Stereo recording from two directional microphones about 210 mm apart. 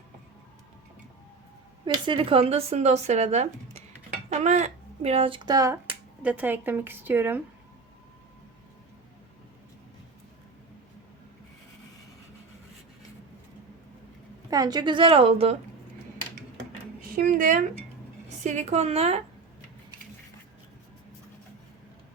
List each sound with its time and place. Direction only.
1.8 s speech: 25° right (ahead or behind)
14.5 s a woman's voice: 20° right (ahead or behind)
17.0 s speech: 45° right (ahead or behind)